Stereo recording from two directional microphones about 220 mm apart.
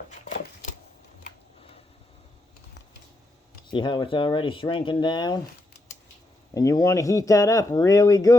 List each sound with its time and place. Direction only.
3.7 s speech: 20° left (ahead or behind)
6.5 s speech: 15° left (ahead or behind)